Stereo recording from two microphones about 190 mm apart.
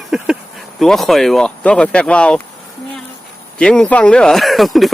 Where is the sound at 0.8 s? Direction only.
Centre (ahead or behind).